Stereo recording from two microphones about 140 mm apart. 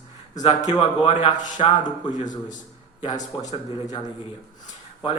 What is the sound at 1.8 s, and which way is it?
Speech, 65° left (ahead or behind).